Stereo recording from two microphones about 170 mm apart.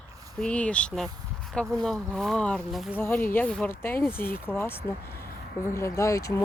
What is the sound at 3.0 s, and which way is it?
Speech, 15° left (ahead or behind).